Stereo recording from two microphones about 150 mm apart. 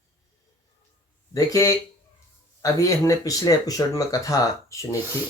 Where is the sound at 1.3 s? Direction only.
25° left (ahead or behind).